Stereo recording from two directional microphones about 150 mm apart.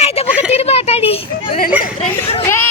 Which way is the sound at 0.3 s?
10° right (ahead or behind).